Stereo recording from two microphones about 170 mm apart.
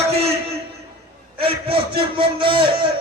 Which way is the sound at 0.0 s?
40° right (ahead or behind).